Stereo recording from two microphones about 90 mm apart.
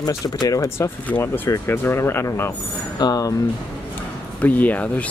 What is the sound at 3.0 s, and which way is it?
Speech, 45° left (ahead or behind).